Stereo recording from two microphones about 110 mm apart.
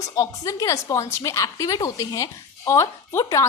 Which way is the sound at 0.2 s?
30° left (ahead or behind).